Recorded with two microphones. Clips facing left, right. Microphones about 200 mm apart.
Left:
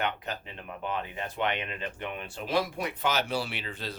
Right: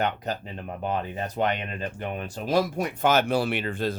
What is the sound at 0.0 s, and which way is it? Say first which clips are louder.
Speech: right 5 dB; 40° right (ahead or behind).